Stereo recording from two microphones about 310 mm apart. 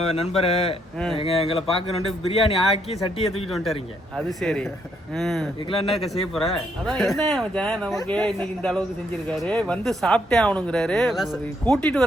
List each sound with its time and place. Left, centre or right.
0.0 s speech: centre
4.2 s speech: centre